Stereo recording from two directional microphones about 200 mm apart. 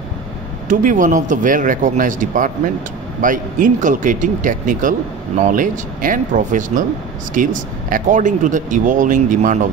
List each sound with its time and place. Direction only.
0.7 s speech: 40° right (ahead or behind)